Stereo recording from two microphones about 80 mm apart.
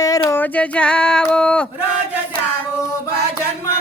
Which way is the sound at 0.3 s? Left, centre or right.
Left.